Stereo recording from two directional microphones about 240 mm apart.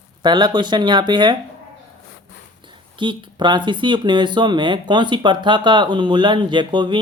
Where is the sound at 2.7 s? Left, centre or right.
Centre.